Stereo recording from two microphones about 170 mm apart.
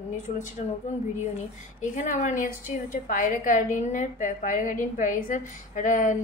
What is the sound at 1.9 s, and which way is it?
A woman's voice, 50° left (ahead or behind).